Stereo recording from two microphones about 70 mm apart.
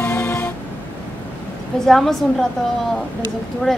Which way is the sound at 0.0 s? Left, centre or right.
Left.